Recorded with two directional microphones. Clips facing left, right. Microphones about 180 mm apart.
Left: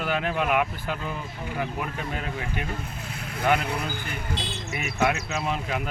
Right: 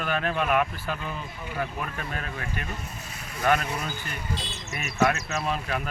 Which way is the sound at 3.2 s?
60° left (ahead or behind).